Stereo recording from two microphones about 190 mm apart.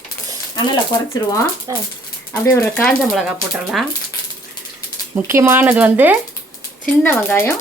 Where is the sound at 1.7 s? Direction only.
20° right (ahead or behind).